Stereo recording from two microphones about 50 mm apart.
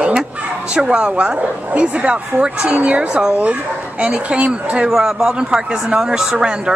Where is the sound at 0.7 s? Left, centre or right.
Centre.